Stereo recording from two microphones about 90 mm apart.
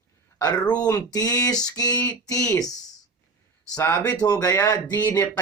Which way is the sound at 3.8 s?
35° left (ahead or behind).